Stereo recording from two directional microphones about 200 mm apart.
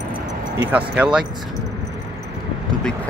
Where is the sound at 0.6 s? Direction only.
5° right (ahead or behind).